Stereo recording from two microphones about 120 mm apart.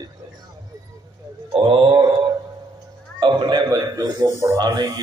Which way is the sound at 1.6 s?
45° right (ahead or behind).